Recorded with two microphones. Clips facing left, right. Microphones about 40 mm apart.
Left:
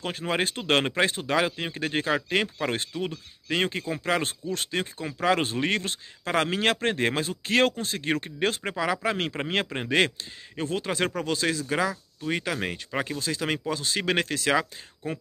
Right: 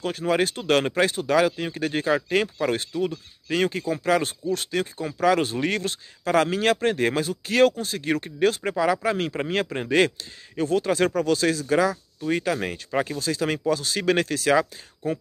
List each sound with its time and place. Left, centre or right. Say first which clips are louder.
0.0 s speech: right 4 dB; left
8.7 s speech: right 4 dB; left